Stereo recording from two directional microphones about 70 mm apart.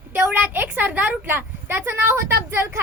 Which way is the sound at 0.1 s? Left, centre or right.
Right.